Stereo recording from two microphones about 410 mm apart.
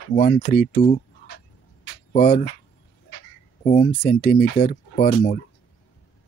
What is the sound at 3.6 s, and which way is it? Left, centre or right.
Speech, centre.